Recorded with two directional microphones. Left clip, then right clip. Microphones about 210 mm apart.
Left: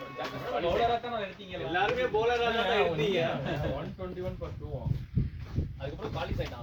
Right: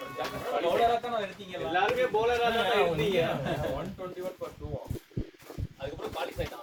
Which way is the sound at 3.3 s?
35° right (ahead or behind).